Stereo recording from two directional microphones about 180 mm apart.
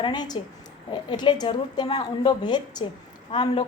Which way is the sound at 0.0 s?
25° left (ahead or behind).